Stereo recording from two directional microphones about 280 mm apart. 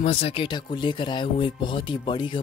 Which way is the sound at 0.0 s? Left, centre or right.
Left.